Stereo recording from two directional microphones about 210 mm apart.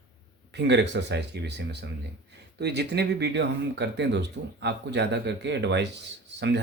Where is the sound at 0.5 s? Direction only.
55° right (ahead or behind).